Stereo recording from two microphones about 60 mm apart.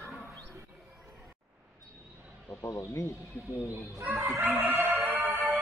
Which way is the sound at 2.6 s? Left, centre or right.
Left.